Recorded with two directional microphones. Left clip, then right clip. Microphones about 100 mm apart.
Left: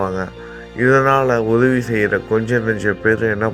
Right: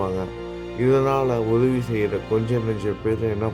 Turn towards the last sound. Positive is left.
turn(degrees=-30)  # may be behind; listen again after turning